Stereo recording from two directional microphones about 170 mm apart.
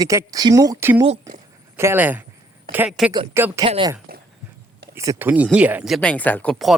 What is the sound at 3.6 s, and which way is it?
Speech, 30° right (ahead or behind).